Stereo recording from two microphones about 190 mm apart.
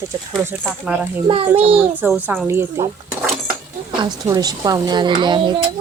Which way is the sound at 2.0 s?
10° right (ahead or behind).